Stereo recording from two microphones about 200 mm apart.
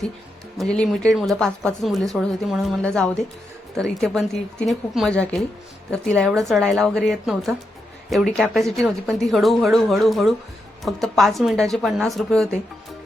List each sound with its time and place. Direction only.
0.6 s speech: 5° left (ahead or behind)